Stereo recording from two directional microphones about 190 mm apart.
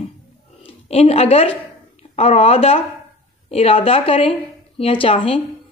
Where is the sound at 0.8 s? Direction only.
35° left (ahead or behind).